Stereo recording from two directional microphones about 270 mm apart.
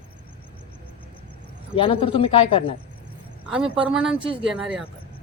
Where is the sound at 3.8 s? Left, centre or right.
Centre.